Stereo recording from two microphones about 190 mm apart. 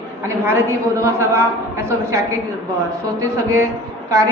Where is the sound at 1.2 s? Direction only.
15° right (ahead or behind).